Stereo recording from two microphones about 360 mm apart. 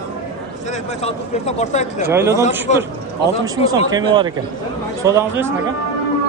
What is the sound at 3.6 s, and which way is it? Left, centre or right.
Speech, centre.